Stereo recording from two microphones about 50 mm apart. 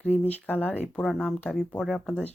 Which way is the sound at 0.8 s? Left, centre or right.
Centre.